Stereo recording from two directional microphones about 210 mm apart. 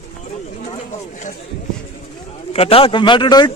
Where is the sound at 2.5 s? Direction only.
25° left (ahead or behind).